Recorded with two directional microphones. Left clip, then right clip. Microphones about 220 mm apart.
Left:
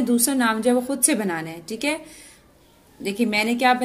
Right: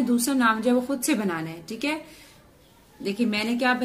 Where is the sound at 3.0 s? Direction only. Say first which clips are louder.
Left 4 dB; 25° left (ahead or behind).